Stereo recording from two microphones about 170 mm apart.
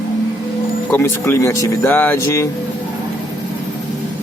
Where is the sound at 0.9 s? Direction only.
15° left (ahead or behind).